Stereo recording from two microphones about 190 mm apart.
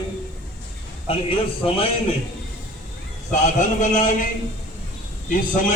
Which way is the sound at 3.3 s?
40° left (ahead or behind).